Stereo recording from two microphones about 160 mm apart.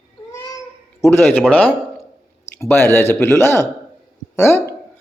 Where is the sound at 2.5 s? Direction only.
15° left (ahead or behind).